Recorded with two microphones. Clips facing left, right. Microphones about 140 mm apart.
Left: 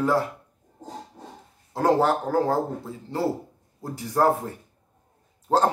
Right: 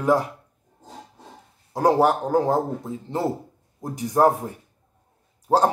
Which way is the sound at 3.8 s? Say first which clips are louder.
Right 4 dB; 20° right (ahead or behind).